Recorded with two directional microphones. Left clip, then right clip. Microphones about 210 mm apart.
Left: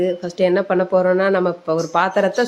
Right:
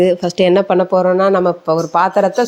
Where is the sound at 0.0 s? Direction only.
35° right (ahead or behind).